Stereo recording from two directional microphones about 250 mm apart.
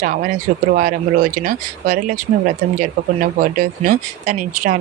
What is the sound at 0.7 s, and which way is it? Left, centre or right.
Speech, right.